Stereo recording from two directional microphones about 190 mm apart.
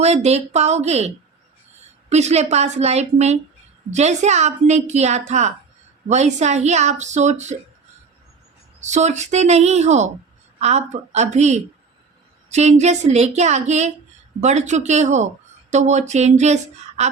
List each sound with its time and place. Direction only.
0.0 s a woman's voice: 35° right (ahead or behind)
8.8 s a woman's voice: 35° right (ahead or behind)